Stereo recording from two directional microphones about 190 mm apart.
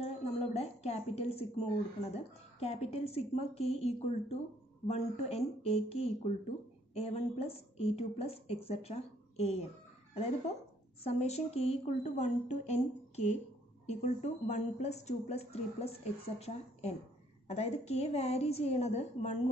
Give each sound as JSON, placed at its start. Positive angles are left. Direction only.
{"t": 0.0, "sound": "a sound", "side_deg": 35}
{"t": 2.0, "sound": "a woman's voice", "side_deg": 35}
{"t": 11.1, "sound": "a woman's voice", "side_deg": 35}